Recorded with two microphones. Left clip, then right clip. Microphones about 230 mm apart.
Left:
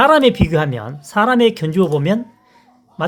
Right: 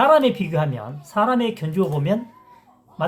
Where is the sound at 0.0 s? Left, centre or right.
Left.